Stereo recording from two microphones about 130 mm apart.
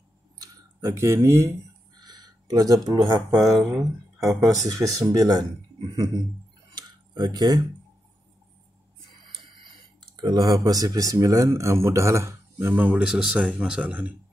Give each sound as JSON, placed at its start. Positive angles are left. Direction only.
{"t": 0.4, "sound": "a sound", "side_deg": -25}
{"t": 3.3, "sound": "speech", "side_deg": 0}
{"t": 5.0, "sound": "speech", "side_deg": -30}
{"t": 6.7, "sound": "tick-tock", "side_deg": -35}
{"t": 9.9, "sound": "speech", "side_deg": -35}